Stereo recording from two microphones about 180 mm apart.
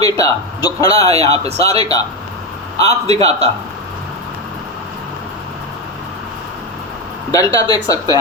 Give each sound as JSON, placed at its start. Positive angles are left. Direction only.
{"t": 0.0, "sound": "speech", "side_deg": 20}
{"t": 1.2, "sound": "speech", "side_deg": -35}
{"t": 1.8, "sound": "speech", "side_deg": 20}
{"t": 3.1, "sound": "speech", "side_deg": -35}
{"t": 7.3, "sound": "speech", "side_deg": 20}